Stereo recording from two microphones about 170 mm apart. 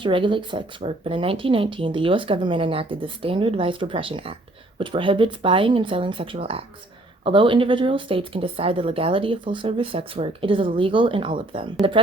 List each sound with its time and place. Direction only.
0.0 s speech: 30° right (ahead or behind)